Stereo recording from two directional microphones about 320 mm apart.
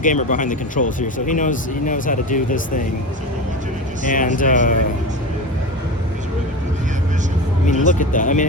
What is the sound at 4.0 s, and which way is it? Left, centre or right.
Speech, left.